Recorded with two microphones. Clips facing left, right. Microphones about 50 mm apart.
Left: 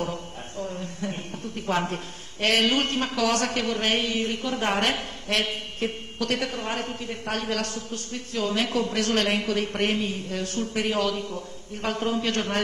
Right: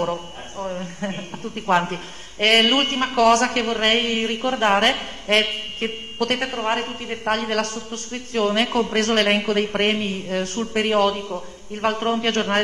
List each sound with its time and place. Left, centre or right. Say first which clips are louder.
0.0 s a man's voice: right 6 dB; right